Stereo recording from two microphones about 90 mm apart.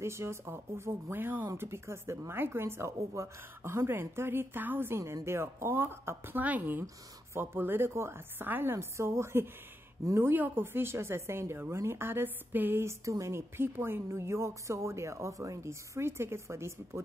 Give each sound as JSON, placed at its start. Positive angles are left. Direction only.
{"t": 0.0, "sound": "a woman's voice", "side_deg": -30}